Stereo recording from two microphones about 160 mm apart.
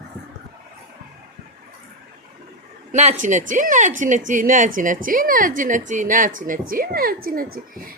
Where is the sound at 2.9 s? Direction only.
45° right (ahead or behind).